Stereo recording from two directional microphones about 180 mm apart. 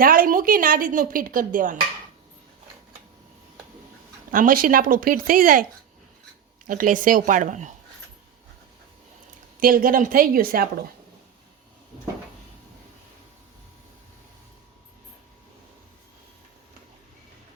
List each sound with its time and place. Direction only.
0.0 s speech: 50° right (ahead or behind)
4.3 s speech: 50° right (ahead or behind)
6.7 s speech: 50° right (ahead or behind)
9.6 s speech: 50° right (ahead or behind)